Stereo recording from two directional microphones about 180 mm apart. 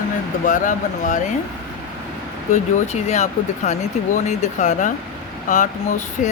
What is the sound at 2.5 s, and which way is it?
Speech, 40° left (ahead or behind).